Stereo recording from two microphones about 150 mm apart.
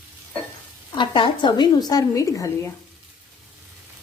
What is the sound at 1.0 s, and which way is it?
A woman's voice, 30° left (ahead or behind).